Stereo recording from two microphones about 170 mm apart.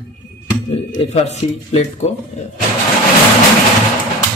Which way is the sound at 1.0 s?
40° left (ahead or behind).